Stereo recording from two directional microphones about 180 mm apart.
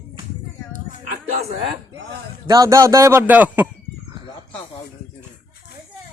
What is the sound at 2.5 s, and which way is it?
A man's voice, 20° right (ahead or behind).